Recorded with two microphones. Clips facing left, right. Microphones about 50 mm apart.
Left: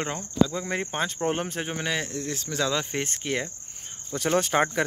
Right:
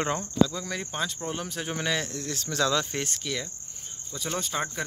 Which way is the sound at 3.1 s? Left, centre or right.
Left.